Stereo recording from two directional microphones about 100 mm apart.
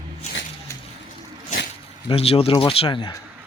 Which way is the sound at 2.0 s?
75° left (ahead or behind).